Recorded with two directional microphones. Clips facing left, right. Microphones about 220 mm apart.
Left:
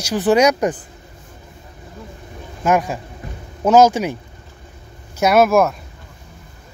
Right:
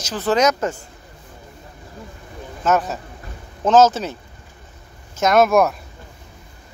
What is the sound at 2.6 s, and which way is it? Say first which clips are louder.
A man's voice: left 2 dB; 10° left (ahead or behind).